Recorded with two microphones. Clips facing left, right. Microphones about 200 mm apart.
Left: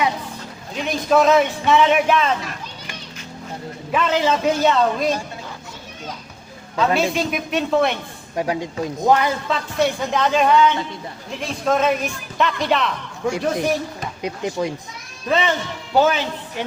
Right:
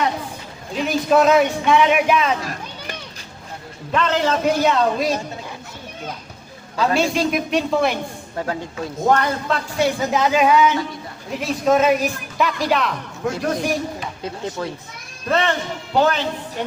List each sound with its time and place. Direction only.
0.8 s speech: centre (ahead or behind)
3.9 s speech: 5° left (ahead or behind)
6.7 s speech: centre (ahead or behind)
8.4 s speech: 15° left (ahead or behind)
9.0 s speech: centre (ahead or behind)
14.2 s speech: 15° left (ahead or behind)
15.3 s speech: 5° left (ahead or behind)